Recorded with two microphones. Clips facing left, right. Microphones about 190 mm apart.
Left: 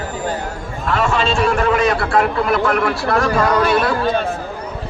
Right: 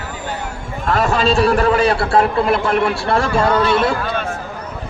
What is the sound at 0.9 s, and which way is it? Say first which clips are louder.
A man's voice: right 2 dB; 40° right (ahead or behind).